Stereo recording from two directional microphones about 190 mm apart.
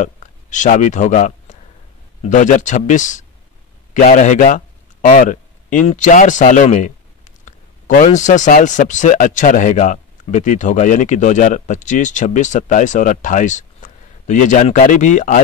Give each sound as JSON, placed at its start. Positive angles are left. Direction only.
{"t": 0.0, "sound": "a man's voice", "side_deg": 40}